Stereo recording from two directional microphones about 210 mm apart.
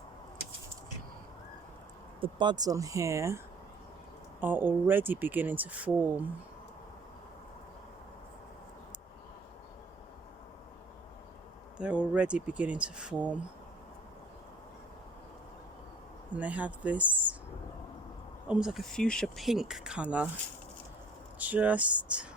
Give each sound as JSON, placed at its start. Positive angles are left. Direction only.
{"t": 2.2, "sound": "speech", "side_deg": -20}
{"t": 11.8, "sound": "speech", "side_deg": -5}
{"t": 16.3, "sound": "speech", "side_deg": -5}
{"t": 18.4, "sound": "speech", "side_deg": -5}
{"t": 21.3, "sound": "speech", "side_deg": -5}